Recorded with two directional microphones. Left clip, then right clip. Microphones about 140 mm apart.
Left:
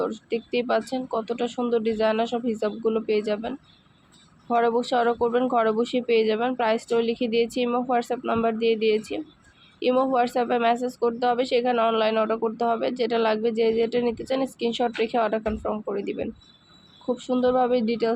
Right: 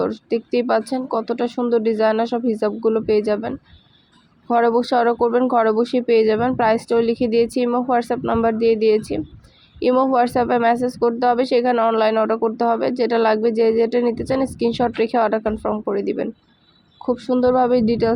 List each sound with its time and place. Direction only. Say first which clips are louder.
0.0 s a woman's voice: right 6 dB; 25° right (ahead or behind)
8.2 s speech: right 5 dB; 10° right (ahead or behind)
8.4 s a woman's voice: right 6 dB; 25° right (ahead or behind)